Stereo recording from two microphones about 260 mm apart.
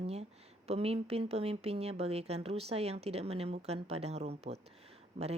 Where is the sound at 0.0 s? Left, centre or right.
Right.